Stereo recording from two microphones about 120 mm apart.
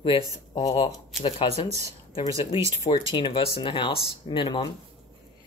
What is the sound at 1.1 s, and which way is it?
Speech, 5° right (ahead or behind).